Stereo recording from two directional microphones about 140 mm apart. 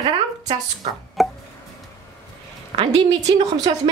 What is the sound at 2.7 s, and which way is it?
Speech, 40° right (ahead or behind).